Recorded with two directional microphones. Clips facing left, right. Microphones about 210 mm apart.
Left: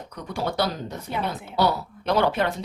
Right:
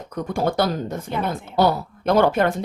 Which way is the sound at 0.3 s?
50° right (ahead or behind).